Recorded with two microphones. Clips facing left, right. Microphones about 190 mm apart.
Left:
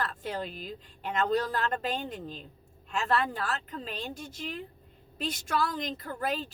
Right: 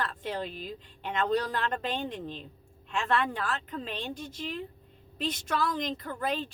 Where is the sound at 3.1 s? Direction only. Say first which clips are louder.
Even; 40° left (ahead or behind).